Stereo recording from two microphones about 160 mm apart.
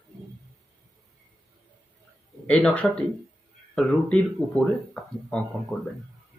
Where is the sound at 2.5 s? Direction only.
10° left (ahead or behind).